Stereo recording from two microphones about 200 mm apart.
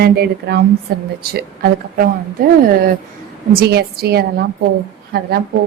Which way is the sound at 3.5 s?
55° right (ahead or behind).